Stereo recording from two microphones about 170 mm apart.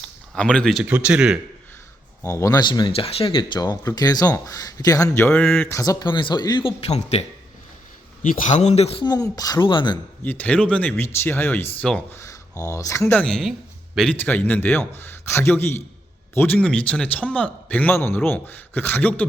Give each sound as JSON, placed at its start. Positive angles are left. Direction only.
{"t": 0.3, "sound": "a man's voice", "side_deg": 5}
{"t": 2.2, "sound": "speech", "side_deg": 20}
{"t": 9.0, "sound": "speech", "side_deg": 20}
{"t": 10.2, "sound": "a man's voice", "side_deg": 10}